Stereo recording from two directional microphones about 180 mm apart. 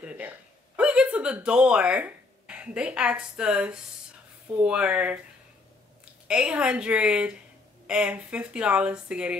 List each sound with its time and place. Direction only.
0.0 s a sound: 5° right (ahead or behind)
0.7 s speech: 5° right (ahead or behind)
6.2 s speech: 5° right (ahead or behind)